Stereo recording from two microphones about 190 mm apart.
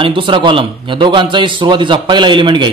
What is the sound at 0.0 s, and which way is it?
A man's voice, 25° right (ahead or behind).